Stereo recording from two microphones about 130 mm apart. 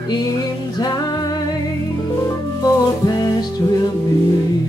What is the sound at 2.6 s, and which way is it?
Music, 30° left (ahead or behind).